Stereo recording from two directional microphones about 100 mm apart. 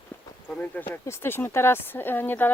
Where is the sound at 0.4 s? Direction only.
15° left (ahead or behind).